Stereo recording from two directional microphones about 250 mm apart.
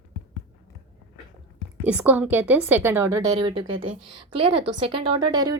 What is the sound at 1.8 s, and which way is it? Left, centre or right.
A woman's voice, centre.